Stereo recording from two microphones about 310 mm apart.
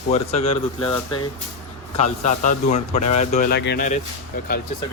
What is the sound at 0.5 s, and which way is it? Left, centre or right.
Speech, centre.